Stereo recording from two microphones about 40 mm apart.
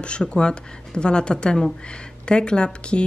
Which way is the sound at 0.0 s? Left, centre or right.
Left.